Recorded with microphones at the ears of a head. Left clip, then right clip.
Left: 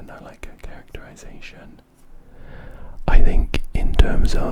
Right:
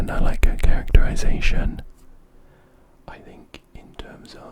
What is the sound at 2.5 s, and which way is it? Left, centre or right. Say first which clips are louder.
Whispering: left 14 dB; left.